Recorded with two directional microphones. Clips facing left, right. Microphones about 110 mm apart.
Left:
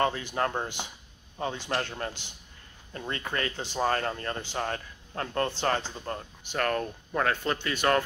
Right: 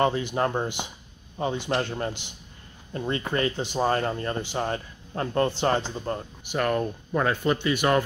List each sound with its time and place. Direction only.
0.0 s speech: 20° right (ahead or behind)